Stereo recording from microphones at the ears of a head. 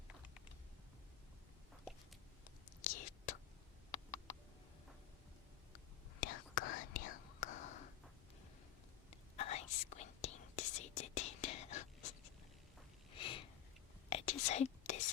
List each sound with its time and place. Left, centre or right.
2.8 s whispering: left
5.7 s whispering: left
9.0 s whispering: left
13.1 s a sound: left
14.1 s whispering: left